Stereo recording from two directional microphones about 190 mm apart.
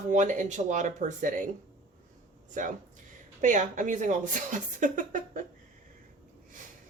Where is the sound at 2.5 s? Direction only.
40° right (ahead or behind).